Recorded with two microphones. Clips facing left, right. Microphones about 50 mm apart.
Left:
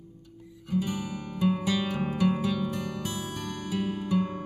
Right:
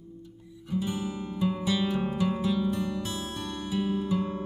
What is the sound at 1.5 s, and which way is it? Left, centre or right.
Music, left.